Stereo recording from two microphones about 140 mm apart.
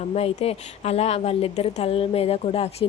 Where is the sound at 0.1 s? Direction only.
50° left (ahead or behind).